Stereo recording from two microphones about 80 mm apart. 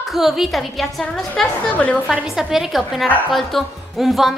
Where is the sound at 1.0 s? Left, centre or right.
Centre.